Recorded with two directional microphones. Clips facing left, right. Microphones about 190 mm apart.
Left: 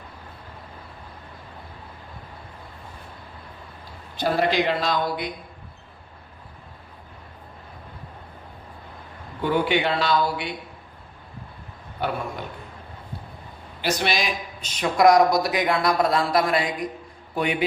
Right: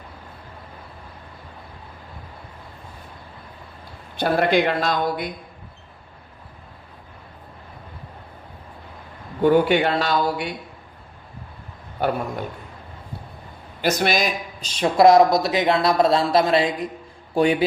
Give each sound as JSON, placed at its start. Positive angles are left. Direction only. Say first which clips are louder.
{"t": 4.2, "sound": "speech", "louder": "right 3 dB", "side_deg": -55}
{"t": 9.4, "sound": "speech", "louder": "right 6 dB", "side_deg": -45}
{"t": 12.0, "sound": "a sound", "louder": "right 5 dB", "side_deg": -45}
{"t": 13.8, "sound": "speech", "louder": "right 4 dB", "side_deg": -45}
{"t": 14.6, "sound": "speech", "louder": "right 3 dB", "side_deg": -30}